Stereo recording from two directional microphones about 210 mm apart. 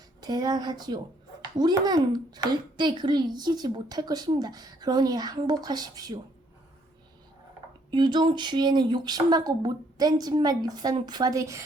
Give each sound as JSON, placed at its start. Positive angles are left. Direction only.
{"t": 0.2, "sound": "a child's voice", "side_deg": -20}
{"t": 7.9, "sound": "a child's voice", "side_deg": -20}